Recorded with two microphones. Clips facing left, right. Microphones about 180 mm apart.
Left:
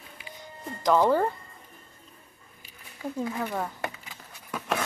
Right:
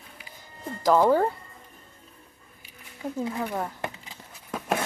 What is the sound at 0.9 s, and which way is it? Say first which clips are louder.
Speech: right 2 dB; 5° right (ahead or behind).